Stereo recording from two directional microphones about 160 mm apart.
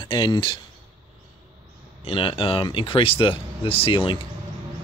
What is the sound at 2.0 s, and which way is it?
Speech, 35° left (ahead or behind).